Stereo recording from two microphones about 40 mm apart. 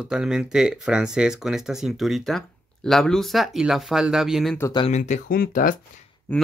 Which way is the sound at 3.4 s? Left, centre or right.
Centre.